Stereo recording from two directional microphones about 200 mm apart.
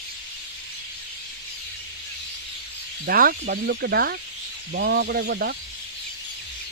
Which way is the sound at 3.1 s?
50° right (ahead or behind).